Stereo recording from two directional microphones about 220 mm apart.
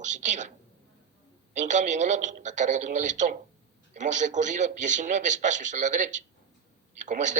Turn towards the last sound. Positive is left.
turn(degrees=-35)  # may be behind; listen again after turning